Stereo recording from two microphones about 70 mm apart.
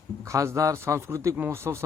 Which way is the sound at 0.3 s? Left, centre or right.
Right.